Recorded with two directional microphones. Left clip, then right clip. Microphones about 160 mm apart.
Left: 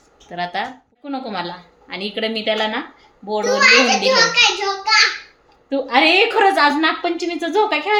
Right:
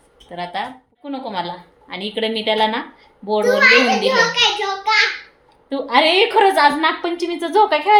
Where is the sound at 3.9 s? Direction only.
10° right (ahead or behind).